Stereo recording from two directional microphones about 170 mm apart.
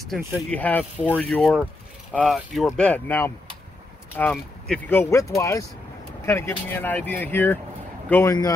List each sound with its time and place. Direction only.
0.5 s speech: 10° left (ahead or behind)